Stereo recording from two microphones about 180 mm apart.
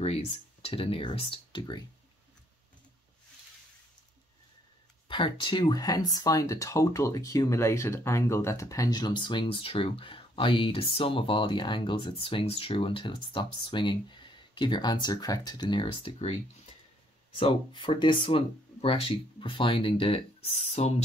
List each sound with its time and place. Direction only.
0.0 s speech: 35° left (ahead or behind)
5.0 s speech: 25° left (ahead or behind)
17.4 s speech: 30° left (ahead or behind)